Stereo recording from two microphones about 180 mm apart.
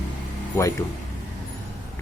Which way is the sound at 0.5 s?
15° left (ahead or behind).